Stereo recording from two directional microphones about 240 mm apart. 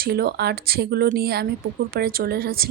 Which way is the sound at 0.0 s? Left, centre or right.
Right.